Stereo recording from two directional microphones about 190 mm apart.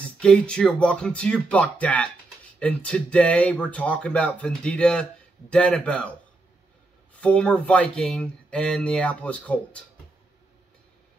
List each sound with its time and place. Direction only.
0.2 s speech: 5° left (ahead or behind)
7.2 s speech: 5° left (ahead or behind)